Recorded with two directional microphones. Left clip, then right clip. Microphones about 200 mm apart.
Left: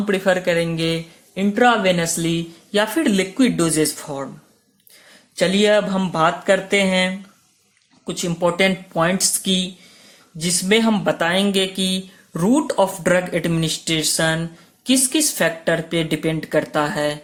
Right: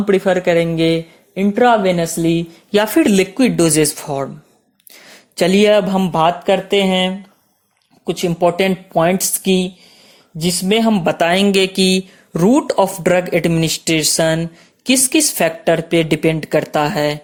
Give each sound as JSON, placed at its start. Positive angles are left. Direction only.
{"t": 0.0, "sound": "speech", "side_deg": -30}
{"t": 5.4, "sound": "speech", "side_deg": -35}
{"t": 8.0, "sound": "speech", "side_deg": -30}